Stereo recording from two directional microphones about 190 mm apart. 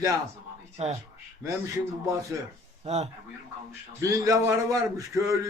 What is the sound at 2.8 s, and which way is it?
Speech, 35° right (ahead or behind).